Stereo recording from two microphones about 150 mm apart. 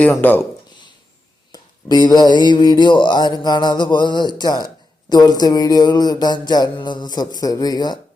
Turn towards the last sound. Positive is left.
turn(degrees=25)  # may be behind; listen again after turning